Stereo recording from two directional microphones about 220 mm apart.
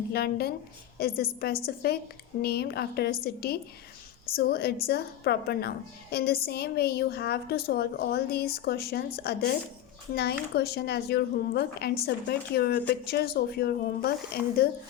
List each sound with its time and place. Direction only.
0.1 s a woman's voice: 45° left (ahead or behind)